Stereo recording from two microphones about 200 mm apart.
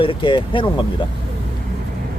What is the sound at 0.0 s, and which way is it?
Speech, 25° left (ahead or behind).